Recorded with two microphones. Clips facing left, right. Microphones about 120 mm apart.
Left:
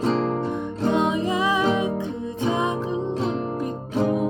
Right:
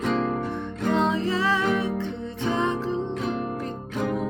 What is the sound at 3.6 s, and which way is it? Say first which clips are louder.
Music: left 4 dB; 15° left (ahead or behind).